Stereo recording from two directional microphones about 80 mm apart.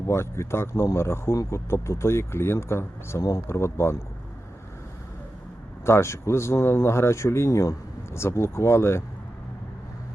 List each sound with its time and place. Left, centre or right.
0.1 s speech: left
5.8 s speech: left